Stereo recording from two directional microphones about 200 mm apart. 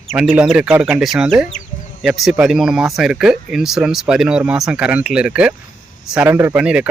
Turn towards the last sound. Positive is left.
turn(degrees=-5)  # may be behind; listen again after turning